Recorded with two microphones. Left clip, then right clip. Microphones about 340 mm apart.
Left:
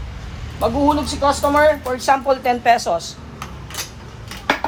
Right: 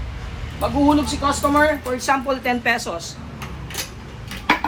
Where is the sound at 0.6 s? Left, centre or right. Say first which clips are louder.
Left 1 dB; left.